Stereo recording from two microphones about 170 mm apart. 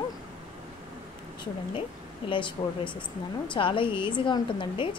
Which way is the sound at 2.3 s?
30° left (ahead or behind).